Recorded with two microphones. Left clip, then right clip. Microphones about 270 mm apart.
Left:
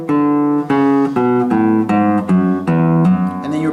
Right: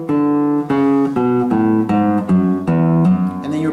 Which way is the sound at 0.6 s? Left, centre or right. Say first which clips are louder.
Left 2 dB; centre.